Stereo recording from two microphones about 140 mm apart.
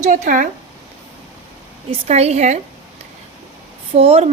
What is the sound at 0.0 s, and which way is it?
Speech, 70° right (ahead or behind).